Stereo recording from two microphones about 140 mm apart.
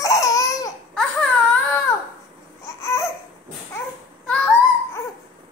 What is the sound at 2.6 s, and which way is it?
Babbling, 20° left (ahead or behind).